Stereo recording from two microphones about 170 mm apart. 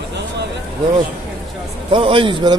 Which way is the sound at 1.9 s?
30° right (ahead or behind).